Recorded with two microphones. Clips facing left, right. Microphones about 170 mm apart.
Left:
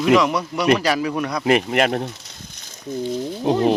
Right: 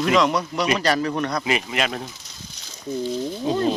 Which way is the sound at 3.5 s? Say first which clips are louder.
Left 4 dB; 70° left (ahead or behind).